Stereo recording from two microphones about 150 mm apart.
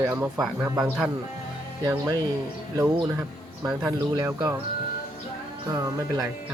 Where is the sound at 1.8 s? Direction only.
25° right (ahead or behind).